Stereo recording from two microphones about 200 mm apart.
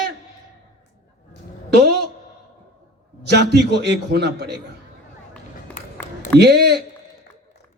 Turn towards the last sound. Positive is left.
turn(degrees=-55)  # may be behind; listen again after turning